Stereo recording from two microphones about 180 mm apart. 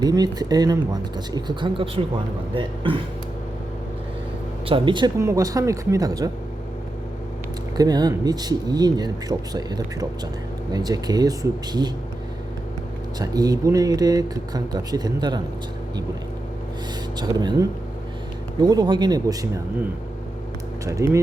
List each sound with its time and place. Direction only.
0.0 s speech: 20° right (ahead or behind)
4.6 s speech: 30° right (ahead or behind)
7.8 s speech: 20° right (ahead or behind)
13.1 s speech: 20° right (ahead or behind)
17.2 s speech: 20° right (ahead or behind)
20.8 s speech: 15° right (ahead or behind)